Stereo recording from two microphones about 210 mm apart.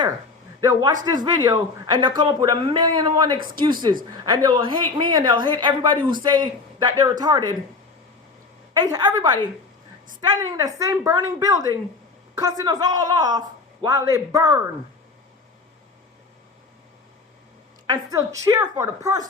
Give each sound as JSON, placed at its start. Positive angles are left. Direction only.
{"t": 0.6, "sound": "a woman's voice", "side_deg": -15}
{"t": 8.7, "sound": "a woman's voice", "side_deg": -20}
{"t": 17.8, "sound": "a woman's voice", "side_deg": -15}